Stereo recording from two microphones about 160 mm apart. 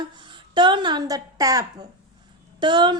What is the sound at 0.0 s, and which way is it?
A woman's voice, 30° right (ahead or behind).